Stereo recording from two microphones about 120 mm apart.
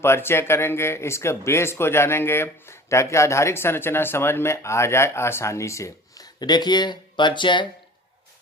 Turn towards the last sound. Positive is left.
turn(degrees=40)  # may be behind; listen again after turning